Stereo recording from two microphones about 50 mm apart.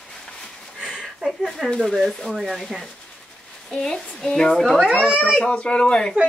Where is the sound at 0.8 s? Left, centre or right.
Centre.